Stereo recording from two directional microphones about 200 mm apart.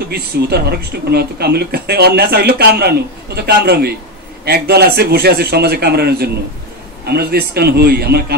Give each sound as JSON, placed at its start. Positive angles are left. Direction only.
{"t": 0.1, "sound": "speech", "side_deg": -50}